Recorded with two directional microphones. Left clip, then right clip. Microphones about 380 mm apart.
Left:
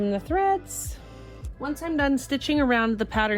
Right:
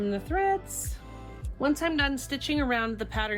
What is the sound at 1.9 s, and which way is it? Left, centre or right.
Speech, centre.